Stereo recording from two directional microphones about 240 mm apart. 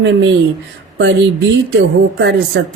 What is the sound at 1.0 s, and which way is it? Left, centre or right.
Speech, right.